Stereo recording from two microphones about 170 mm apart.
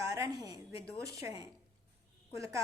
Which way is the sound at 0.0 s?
20° right (ahead or behind).